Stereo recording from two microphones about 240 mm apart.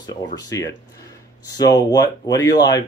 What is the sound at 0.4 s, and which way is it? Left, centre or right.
Speech, centre.